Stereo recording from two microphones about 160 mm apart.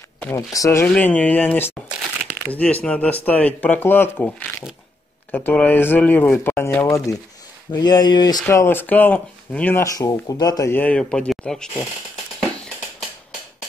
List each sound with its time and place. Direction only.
0.2 s speech: 20° left (ahead or behind)
0.8 s speech: 5° left (ahead or behind)
1.9 s crumpling: 5° right (ahead or behind)
2.4 s speech: 10° left (ahead or behind)